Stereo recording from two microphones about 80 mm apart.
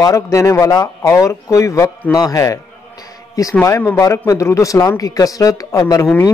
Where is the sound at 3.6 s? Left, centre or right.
Left.